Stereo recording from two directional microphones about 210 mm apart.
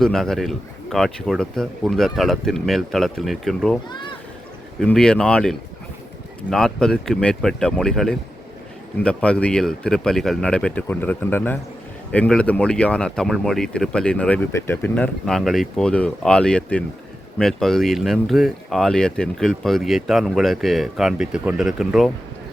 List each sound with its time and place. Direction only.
0.0 s speech: centre (ahead or behind)
3.8 s speech: 20° left (ahead or behind)
4.8 s speech: 5° left (ahead or behind)